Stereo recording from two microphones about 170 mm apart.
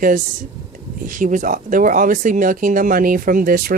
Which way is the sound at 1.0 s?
50° right (ahead or behind).